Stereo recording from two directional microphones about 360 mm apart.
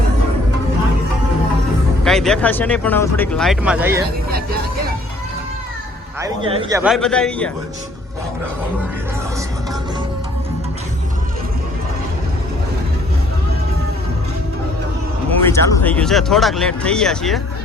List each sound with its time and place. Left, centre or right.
2.0 s speech: centre
4.3 s speech: right
6.1 s speech: centre
15.4 s speech: centre